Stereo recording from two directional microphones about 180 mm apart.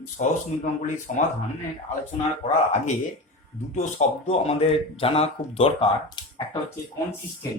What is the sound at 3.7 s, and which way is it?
Speech, 40° left (ahead or behind).